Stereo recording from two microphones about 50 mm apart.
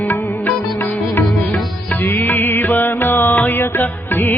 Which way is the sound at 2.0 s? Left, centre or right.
Left.